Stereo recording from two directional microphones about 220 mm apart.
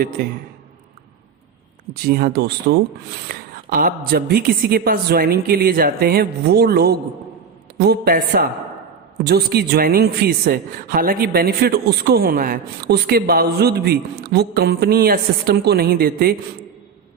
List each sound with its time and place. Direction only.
2.0 s a man's voice: 45° right (ahead or behind)